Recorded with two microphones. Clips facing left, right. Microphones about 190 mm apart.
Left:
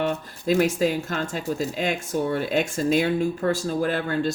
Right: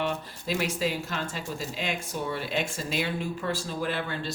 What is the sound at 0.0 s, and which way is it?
Speech, 45° left (ahead or behind).